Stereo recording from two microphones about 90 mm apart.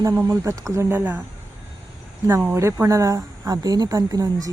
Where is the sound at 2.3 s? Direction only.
25° right (ahead or behind).